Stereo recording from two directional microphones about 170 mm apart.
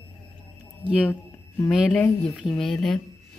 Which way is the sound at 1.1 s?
10° left (ahead or behind).